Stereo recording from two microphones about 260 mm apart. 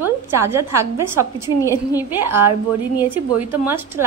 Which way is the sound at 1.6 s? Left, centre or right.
Centre.